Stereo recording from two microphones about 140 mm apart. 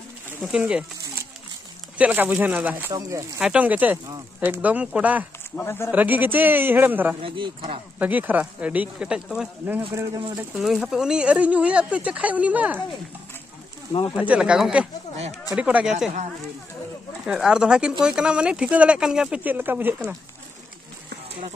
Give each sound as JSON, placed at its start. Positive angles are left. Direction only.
{"t": 0.4, "sound": "speech", "side_deg": -5}
{"t": 2.0, "sound": "speech", "side_deg": -10}
{"t": 2.9, "sound": "speech", "side_deg": -25}
{"t": 3.3, "sound": "speech", "side_deg": -5}
{"t": 5.6, "sound": "speech", "side_deg": 15}
{"t": 5.9, "sound": "speech", "side_deg": -10}
{"t": 7.2, "sound": "speech", "side_deg": -40}
{"t": 8.0, "sound": "speech", "side_deg": -10}
{"t": 9.9, "sound": "speech", "side_deg": -25}
{"t": 10.3, "sound": "speech", "side_deg": -5}
{"t": 14.1, "sound": "speech", "side_deg": -10}
{"t": 17.3, "sound": "speech", "side_deg": -5}